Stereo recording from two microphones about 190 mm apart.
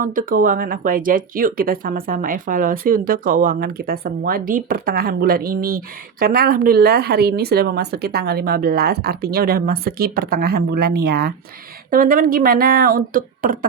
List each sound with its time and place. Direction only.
0.0 s speech: 45° right (ahead or behind)